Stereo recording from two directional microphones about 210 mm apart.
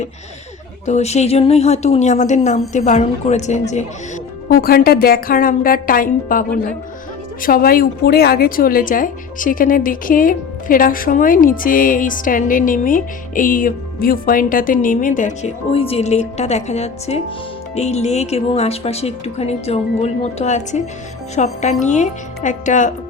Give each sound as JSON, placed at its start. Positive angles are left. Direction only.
{"t": 0.9, "sound": "a woman's voice", "side_deg": 30}
{"t": 4.4, "sound": "a woman's voice", "side_deg": 45}